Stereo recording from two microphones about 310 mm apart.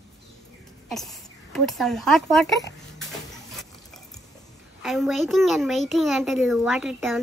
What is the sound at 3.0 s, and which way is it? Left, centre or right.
Dishes, centre.